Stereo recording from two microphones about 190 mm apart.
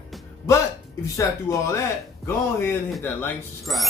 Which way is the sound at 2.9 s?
5° left (ahead or behind).